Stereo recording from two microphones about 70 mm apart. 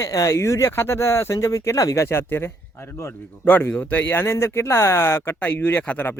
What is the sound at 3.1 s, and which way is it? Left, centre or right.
Speech, left.